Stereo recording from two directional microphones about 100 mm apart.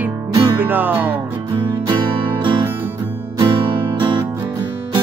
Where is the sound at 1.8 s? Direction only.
50° right (ahead or behind).